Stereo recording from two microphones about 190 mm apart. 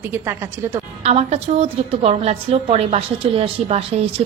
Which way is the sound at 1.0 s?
35° right (ahead or behind).